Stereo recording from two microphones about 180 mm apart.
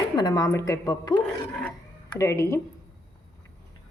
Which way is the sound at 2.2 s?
15° left (ahead or behind).